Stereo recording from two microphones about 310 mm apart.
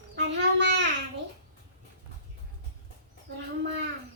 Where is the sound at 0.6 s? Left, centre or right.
Right.